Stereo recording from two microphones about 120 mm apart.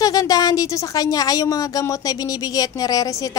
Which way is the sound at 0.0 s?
30° left (ahead or behind).